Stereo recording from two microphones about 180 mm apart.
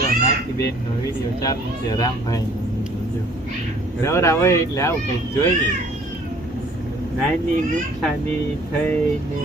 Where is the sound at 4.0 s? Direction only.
15° left (ahead or behind).